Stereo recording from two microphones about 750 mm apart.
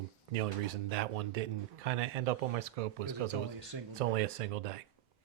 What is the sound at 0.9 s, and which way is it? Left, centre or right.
Speech, right.